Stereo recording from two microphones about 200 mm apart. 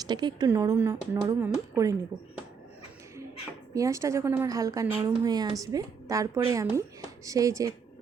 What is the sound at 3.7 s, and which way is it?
A woman's voice, 15° right (ahead or behind).